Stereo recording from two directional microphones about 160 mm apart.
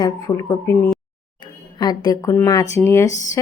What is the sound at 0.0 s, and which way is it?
Speech, 25° left (ahead or behind).